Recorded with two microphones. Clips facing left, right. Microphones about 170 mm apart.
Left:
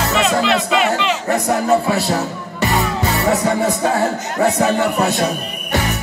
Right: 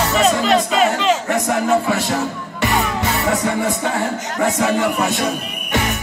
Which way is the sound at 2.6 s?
40° left (ahead or behind).